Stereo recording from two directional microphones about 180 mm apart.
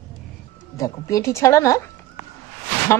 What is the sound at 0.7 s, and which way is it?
Speech, 15° left (ahead or behind).